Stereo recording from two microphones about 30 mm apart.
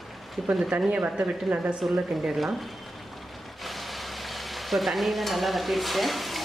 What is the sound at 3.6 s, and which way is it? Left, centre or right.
Stir, centre.